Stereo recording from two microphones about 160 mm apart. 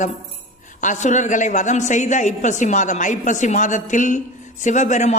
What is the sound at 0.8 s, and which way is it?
A woman's voice, 50° left (ahead or behind).